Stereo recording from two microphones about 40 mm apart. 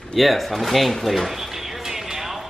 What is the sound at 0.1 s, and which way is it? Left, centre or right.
Speech, centre.